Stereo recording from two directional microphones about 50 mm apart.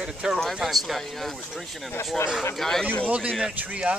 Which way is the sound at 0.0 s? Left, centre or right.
Centre.